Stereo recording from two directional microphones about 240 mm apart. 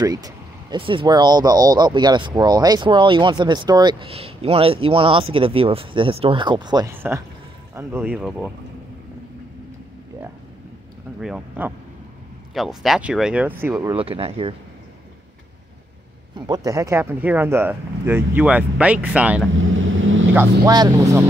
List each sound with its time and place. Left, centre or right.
0.0 s speech: centre
11.1 s speech: centre
13.9 s speech: right
16.3 s speech: centre
19.5 s vehicle: right
20.3 s speech: centre